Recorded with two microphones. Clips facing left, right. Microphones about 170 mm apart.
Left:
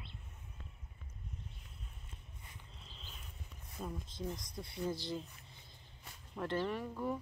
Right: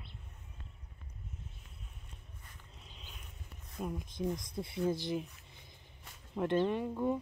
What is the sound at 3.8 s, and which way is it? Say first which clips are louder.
Speech: right 5 dB; 15° right (ahead or behind).